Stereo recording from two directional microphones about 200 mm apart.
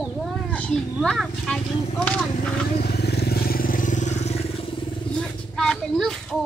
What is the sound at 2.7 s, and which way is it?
Vehicle, 50° left (ahead or behind).